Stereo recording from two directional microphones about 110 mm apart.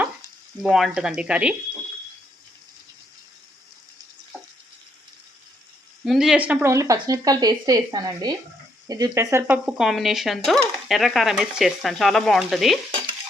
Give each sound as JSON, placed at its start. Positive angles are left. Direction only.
{"t": 0.6, "sound": "speech", "side_deg": -5}
{"t": 6.1, "sound": "speech", "side_deg": -5}
{"t": 6.7, "sound": "speech", "side_deg": -30}
{"t": 9.5, "sound": "dishes", "side_deg": -10}